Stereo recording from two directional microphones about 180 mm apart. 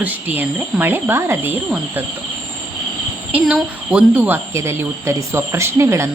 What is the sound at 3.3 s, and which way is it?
Cricket, 5° right (ahead or behind).